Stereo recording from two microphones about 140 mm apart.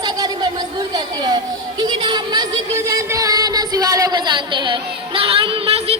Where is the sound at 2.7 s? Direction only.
20° right (ahead or behind); by 6.0 s 45° right (ahead or behind).